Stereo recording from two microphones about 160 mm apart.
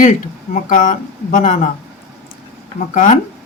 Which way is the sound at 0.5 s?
60° left (ahead or behind).